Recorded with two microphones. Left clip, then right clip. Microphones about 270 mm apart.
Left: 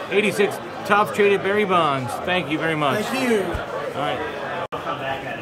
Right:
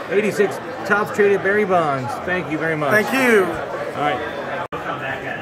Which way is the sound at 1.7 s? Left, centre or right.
Centre.